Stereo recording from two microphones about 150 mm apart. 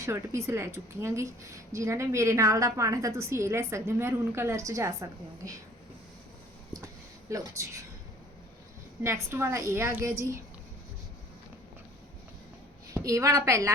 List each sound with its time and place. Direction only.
0.0 s a woman's voice: 20° right (ahead or behind)
6.7 s a sound: 20° right (ahead or behind)
9.0 s a woman's voice: 15° right (ahead or behind)
12.9 s a woman's voice: 20° right (ahead or behind)